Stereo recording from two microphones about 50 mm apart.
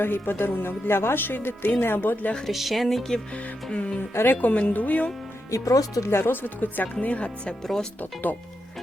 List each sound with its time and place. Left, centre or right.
0.0 s speech: left
2.5 s speech: centre
3.7 s speech: centre
4.1 s speech: left
4.4 s speech: left
5.5 s speech: left
7.0 s speech: left